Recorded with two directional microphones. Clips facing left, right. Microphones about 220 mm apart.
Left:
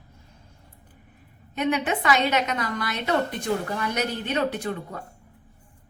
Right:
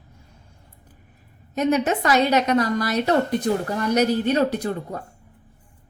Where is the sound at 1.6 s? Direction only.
40° right (ahead or behind).